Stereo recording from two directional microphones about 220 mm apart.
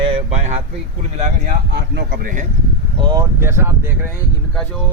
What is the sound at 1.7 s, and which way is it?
Speech, 50° right (ahead or behind).